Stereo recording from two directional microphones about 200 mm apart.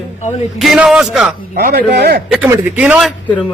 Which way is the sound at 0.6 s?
Centre (ahead or behind).